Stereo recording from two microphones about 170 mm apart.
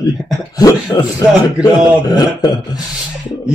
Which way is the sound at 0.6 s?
20° left (ahead or behind).